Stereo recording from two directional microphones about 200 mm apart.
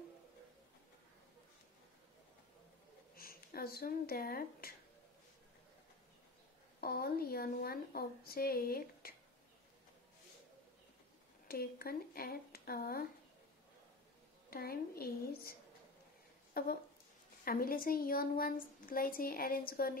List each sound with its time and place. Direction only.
3.2 s speech: 50° left (ahead or behind)
6.8 s a woman's voice: 50° left (ahead or behind)
11.4 s a woman's voice: 50° left (ahead or behind)
14.5 s a woman's voice: 50° left (ahead or behind)
16.6 s a woman's voice: 50° left (ahead or behind)